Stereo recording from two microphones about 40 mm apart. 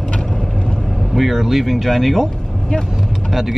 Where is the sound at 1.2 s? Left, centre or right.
Centre.